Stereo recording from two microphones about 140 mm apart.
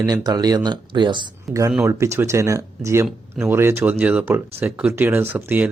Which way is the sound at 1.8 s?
20° right (ahead or behind).